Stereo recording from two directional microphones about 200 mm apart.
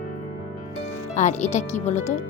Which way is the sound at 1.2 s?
35° left (ahead or behind).